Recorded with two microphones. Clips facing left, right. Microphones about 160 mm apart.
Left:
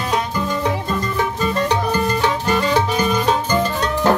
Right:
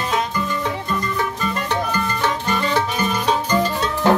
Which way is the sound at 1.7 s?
15° left (ahead or behind).